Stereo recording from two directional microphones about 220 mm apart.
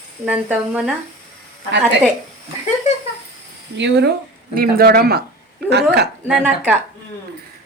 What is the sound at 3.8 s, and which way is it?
Speech, 50° right (ahead or behind).